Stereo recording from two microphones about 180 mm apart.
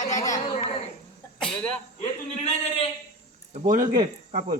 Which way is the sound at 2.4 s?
35° left (ahead or behind).